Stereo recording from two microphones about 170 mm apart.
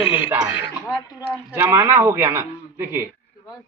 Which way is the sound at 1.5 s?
15° right (ahead or behind).